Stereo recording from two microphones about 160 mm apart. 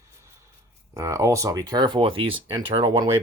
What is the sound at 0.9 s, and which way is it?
Speech, 20° right (ahead or behind).